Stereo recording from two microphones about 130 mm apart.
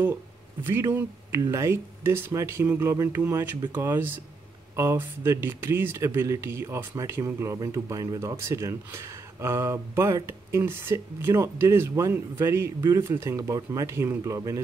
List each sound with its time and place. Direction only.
0.7 s speech: 20° right (ahead or behind)